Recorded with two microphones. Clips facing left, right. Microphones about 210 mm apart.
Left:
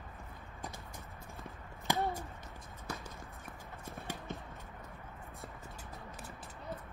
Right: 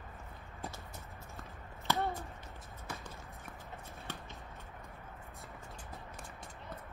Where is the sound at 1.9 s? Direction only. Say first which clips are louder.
Even; 15° left (ahead or behind).